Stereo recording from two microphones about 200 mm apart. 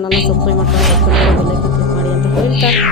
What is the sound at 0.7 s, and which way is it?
Music, centre (ahead or behind).